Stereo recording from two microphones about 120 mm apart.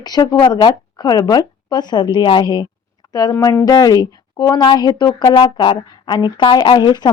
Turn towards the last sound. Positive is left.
turn(degrees=40)  # may be behind; listen again after turning